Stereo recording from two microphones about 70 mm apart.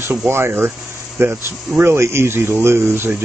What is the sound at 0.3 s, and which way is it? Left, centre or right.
Speech, right.